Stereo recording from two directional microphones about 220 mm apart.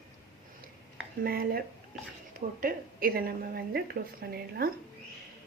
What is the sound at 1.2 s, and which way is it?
Speech, 40° right (ahead or behind).